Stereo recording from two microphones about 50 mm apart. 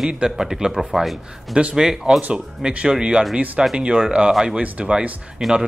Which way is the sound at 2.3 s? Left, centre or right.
Centre.